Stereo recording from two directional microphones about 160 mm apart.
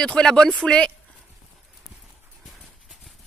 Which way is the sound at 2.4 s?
Centre (ahead or behind).